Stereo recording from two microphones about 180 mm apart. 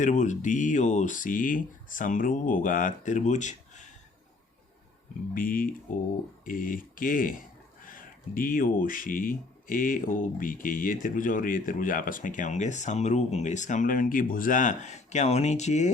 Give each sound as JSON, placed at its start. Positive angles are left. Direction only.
{"t": 0.0, "sound": "speech", "side_deg": 40}
{"t": 5.3, "sound": "speech", "side_deg": 50}